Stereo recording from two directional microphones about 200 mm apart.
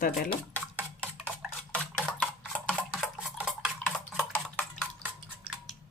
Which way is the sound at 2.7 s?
Centre (ahead or behind).